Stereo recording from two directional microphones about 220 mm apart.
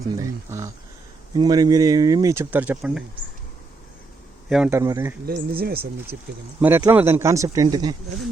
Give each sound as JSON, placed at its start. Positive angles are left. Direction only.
{"t": 0.2, "sound": "speech", "side_deg": -15}
{"t": 4.4, "sound": "speech", "side_deg": 0}
{"t": 4.7, "sound": "speech", "side_deg": -15}
{"t": 5.2, "sound": "speech", "side_deg": -45}
{"t": 6.6, "sound": "speech", "side_deg": -10}